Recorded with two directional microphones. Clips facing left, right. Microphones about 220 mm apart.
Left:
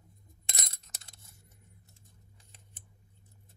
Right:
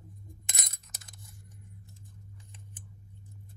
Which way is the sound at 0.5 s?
25° left (ahead or behind).